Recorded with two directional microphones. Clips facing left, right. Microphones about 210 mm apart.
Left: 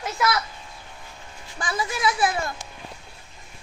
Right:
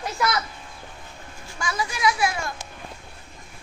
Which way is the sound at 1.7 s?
30° left (ahead or behind).